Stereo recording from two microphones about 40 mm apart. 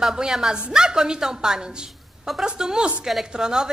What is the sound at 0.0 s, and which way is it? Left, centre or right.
A woman's voice, centre.